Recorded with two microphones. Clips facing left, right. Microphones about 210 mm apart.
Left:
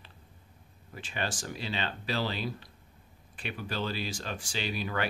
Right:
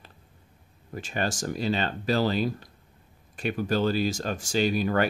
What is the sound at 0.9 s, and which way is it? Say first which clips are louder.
Speech: right 6 dB; 45° right (ahead or behind).